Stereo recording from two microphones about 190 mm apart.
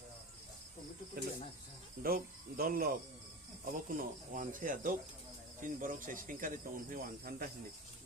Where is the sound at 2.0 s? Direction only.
50° right (ahead or behind).